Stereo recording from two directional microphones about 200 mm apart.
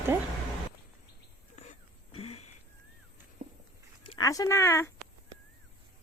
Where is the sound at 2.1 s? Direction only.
30° left (ahead or behind).